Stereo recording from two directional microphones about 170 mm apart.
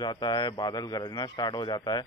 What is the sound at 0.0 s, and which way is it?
Speech, 25° left (ahead or behind).